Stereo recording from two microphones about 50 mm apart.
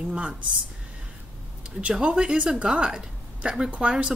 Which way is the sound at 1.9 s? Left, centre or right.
Centre.